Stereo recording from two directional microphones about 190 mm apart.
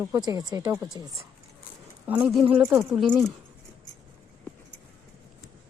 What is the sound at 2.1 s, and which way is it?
Speech, 5° right (ahead or behind).